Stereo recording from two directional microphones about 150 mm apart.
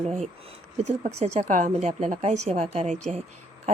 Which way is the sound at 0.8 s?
50° right (ahead or behind).